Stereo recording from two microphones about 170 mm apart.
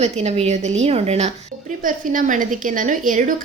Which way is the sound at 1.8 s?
50° right (ahead or behind).